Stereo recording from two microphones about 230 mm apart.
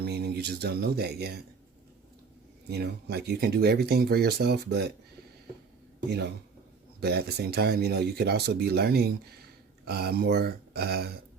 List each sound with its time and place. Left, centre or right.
0.0 s speech: right
2.6 s speech: right
6.1 s speech: right